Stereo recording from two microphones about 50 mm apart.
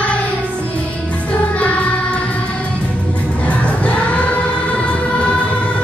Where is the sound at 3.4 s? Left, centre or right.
Left.